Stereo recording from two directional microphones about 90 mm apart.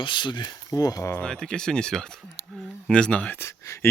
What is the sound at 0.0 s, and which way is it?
Speech, 60° left (ahead or behind).